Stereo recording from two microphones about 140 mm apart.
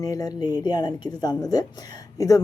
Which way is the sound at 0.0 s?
25° left (ahead or behind).